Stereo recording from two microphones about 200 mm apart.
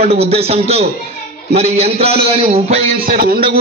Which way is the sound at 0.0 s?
30° right (ahead or behind).